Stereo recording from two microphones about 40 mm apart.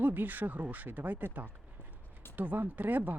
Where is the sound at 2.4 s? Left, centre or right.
Right.